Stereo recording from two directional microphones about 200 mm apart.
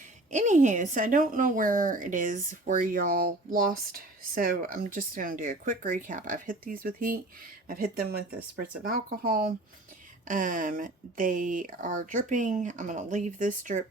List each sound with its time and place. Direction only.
0.3 s speech: 35° right (ahead or behind)